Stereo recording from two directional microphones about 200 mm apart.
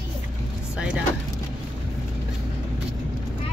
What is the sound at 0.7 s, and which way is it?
Speech, 5° right (ahead or behind).